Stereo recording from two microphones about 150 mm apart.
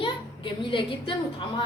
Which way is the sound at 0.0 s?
35° left (ahead or behind).